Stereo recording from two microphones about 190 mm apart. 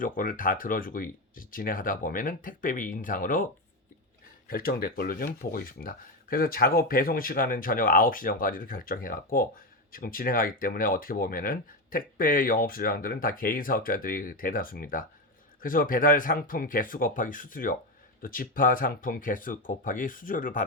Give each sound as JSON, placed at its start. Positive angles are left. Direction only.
{"t": 0.0, "sound": "speech", "side_deg": 45}